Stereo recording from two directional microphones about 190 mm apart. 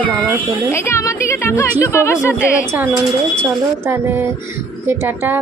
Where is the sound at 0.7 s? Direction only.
15° left (ahead or behind).